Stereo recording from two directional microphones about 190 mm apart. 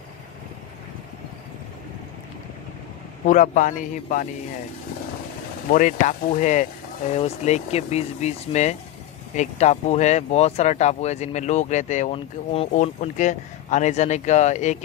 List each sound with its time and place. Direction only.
3.3 s a man's voice: 45° left (ahead or behind)
5.7 s speech: 45° left (ahead or behind)